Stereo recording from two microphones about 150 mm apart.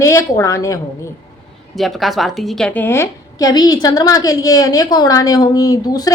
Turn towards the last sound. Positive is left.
turn(degrees=25)  # may be behind; listen again after turning